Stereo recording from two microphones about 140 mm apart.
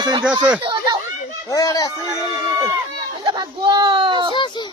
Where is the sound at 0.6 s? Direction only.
35° right (ahead or behind).